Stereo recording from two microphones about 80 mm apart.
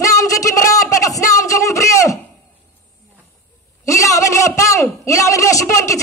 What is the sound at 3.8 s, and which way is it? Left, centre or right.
A woman's voice, left.